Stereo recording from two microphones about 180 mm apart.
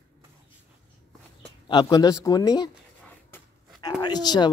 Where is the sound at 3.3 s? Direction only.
20° left (ahead or behind).